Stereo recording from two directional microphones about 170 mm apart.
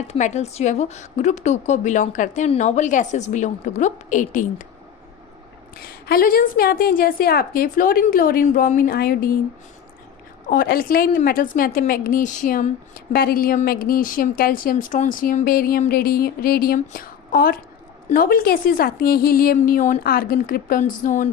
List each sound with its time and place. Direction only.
0.1 s a woman's voice: 40° left (ahead or behind)
5.8 s a woman's voice: 60° left (ahead or behind)
10.5 s a woman's voice: 60° left (ahead or behind)